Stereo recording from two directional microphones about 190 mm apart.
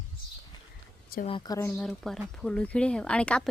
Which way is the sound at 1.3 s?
25° left (ahead or behind).